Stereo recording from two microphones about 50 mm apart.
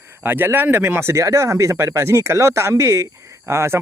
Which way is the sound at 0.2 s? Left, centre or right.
Right.